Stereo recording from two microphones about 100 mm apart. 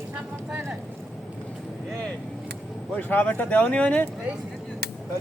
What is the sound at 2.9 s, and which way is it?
Speech, 15° left (ahead or behind).